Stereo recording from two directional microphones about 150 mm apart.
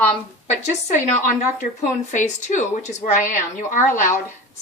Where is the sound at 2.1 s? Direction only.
55° left (ahead or behind).